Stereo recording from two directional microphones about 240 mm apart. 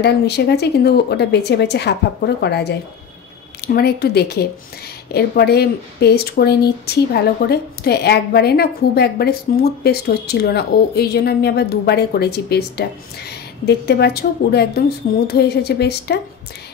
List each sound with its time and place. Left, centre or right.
0.0 s a woman's voice: left